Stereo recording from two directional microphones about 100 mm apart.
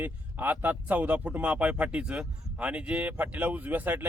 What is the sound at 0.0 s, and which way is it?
Speech, 20° right (ahead or behind).